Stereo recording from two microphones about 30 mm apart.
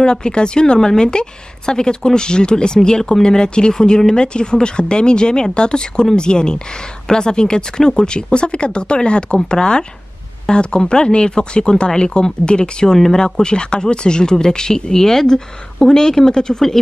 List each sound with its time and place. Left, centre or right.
0.0 s speech: left